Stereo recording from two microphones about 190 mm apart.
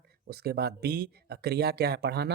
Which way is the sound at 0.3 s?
55° right (ahead or behind).